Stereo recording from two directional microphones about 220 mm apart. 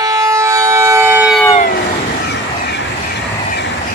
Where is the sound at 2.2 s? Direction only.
50° left (ahead or behind).